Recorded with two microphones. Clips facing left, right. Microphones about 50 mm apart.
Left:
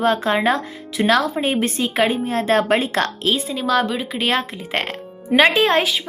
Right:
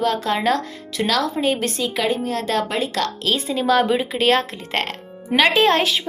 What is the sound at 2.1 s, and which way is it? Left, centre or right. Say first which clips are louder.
Speech: left 3 dB; left.